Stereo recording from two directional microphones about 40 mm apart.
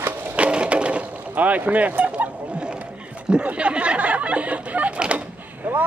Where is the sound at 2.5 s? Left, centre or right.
Right.